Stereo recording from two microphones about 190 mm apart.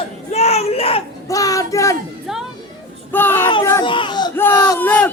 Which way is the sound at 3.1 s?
10° left (ahead or behind).